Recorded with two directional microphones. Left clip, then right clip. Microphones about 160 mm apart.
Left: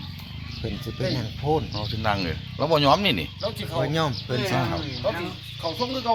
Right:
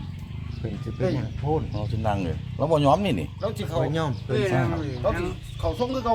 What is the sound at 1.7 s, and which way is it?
Speech, 20° left (ahead or behind).